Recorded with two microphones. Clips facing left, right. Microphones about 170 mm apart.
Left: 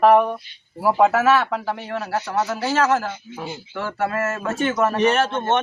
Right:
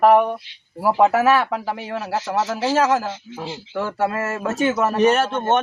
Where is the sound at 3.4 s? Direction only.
90° right.